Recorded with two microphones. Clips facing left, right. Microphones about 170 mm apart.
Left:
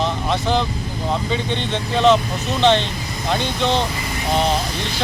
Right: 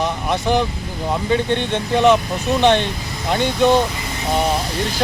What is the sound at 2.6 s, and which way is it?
Speech, 15° right (ahead or behind).